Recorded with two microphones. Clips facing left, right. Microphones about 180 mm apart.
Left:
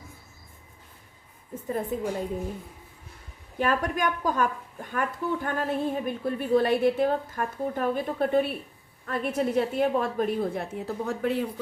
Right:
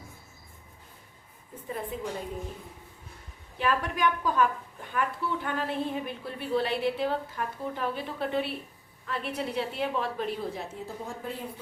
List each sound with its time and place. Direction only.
1.6 s a woman's voice: 45° left (ahead or behind)
3.6 s a woman's voice: 45° left (ahead or behind); by 11.4 s 75° left (ahead or behind)